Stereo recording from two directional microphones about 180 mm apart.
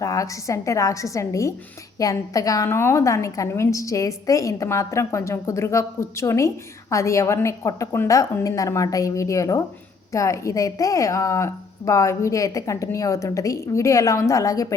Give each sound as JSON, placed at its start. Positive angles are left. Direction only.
{"t": 0.0, "sound": "a woman's voice", "side_deg": 15}